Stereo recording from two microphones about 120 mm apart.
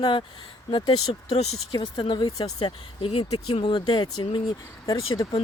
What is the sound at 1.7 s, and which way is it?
Speech, 40° left (ahead or behind).